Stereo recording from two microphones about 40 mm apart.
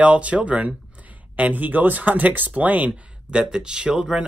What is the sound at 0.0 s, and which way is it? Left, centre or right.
Speech, right.